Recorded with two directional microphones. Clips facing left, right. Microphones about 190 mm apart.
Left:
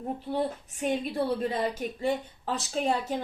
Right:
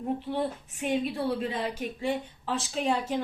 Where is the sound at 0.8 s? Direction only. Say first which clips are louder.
Even; 40° left (ahead or behind).